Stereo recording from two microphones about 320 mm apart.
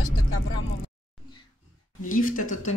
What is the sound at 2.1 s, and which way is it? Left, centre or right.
Speech, left.